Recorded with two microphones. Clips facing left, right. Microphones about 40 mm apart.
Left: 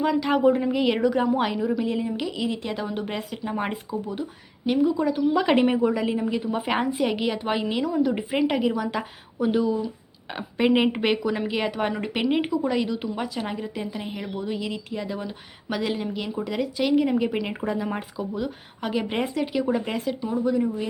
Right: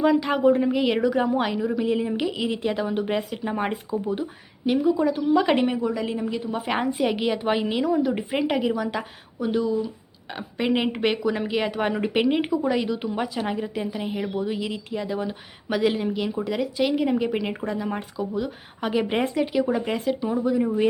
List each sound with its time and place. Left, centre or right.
0.0 s a woman's voice: centre
4.0 s speech: centre
4.6 s a woman's voice: centre
5.7 s a woman's voice: centre
6.0 s a woman's voice: centre